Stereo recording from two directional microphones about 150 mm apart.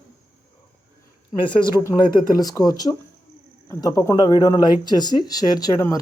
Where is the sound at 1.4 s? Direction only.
35° left (ahead or behind).